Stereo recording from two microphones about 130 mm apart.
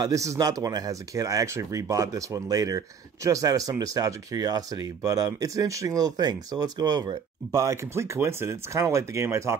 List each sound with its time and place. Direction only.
0.0 s speech: 25° right (ahead or behind)